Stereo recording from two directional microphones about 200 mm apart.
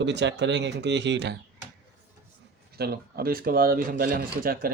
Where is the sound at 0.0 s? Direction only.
60° right (ahead or behind).